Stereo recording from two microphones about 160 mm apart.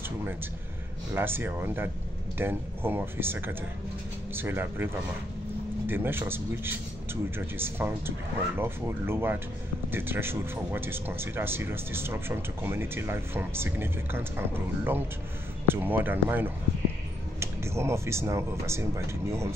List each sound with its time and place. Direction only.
1.1 s speech: 15° right (ahead or behind)
5.9 s speech: 15° right (ahead or behind)